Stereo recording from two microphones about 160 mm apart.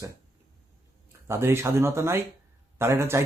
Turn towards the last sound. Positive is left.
turn(degrees=-15)  # may be behind; listen again after turning